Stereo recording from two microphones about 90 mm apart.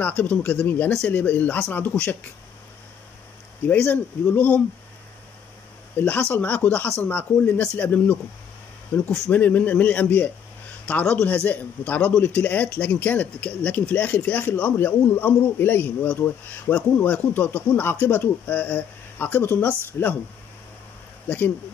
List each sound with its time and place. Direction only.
0.0 s speech: 15° left (ahead or behind)
3.6 s a man's voice: 20° left (ahead or behind)
5.9 s a man's voice: 20° left (ahead or behind)
9.3 s a man's voice: 20° left (ahead or behind)